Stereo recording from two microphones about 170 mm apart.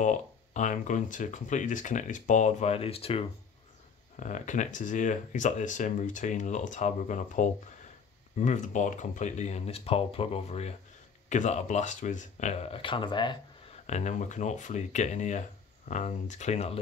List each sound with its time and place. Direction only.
0.0 s speech: 45° left (ahead or behind)
4.2 s speech: 45° left (ahead or behind); by 13.4 s 25° left (ahead or behind)
13.8 s speech: 45° left (ahead or behind)